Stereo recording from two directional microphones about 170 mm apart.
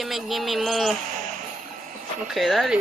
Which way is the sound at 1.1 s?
50° right (ahead or behind).